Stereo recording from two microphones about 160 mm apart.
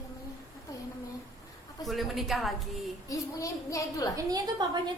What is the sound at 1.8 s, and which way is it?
A woman's voice, centre (ahead or behind).